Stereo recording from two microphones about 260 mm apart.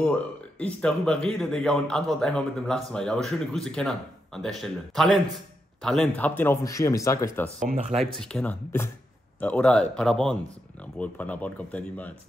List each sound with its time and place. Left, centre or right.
0.0 s a man's voice: centre
7.6 s speech: right
8.0 s a man's voice: centre